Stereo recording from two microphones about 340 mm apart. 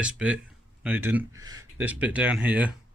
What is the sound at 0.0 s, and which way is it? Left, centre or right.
Speech, centre.